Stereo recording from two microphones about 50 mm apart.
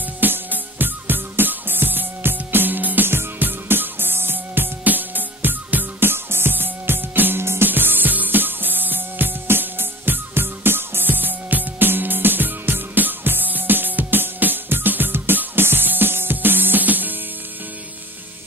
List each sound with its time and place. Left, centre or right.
0.2 s music: right